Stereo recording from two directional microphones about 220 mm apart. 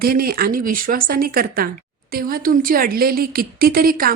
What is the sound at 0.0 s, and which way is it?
Speech, 45° right (ahead or behind).